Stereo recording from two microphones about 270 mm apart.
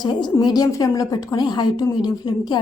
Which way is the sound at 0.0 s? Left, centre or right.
Centre.